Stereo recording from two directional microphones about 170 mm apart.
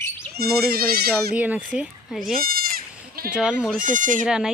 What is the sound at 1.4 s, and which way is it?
Speech, 10° right (ahead or behind).